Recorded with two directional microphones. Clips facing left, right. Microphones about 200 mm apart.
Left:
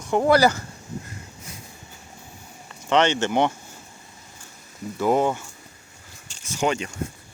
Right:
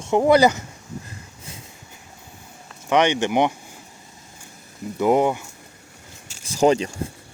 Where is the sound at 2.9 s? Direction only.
15° right (ahead or behind).